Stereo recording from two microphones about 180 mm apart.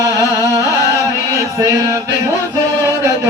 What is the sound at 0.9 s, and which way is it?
Chant, 15° right (ahead or behind).